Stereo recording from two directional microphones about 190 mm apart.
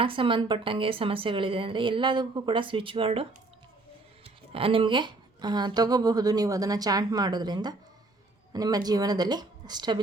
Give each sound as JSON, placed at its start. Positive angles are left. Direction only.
{"t": 0.0, "sound": "speech", "side_deg": -25}